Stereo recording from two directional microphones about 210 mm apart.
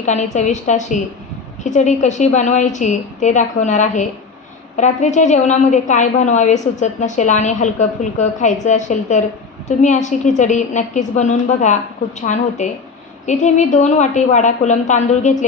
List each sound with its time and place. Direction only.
0.0 s a woman's voice: 35° left (ahead or behind)